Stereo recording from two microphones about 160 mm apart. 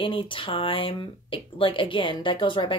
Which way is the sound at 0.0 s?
30° left (ahead or behind).